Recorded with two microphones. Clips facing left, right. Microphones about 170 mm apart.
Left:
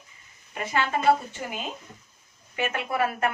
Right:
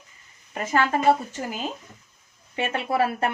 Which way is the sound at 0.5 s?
40° right (ahead or behind).